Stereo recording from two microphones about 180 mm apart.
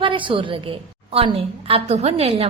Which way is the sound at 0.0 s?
30° right (ahead or behind).